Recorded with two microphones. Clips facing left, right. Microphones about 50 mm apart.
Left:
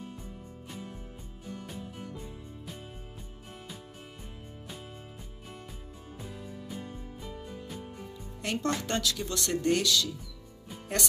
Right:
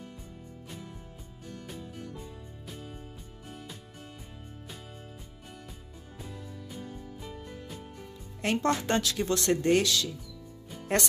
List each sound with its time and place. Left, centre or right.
6.3 s music: centre
8.4 s speech: right